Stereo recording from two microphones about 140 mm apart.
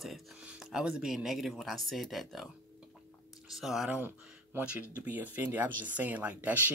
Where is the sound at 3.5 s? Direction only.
Centre (ahead or behind).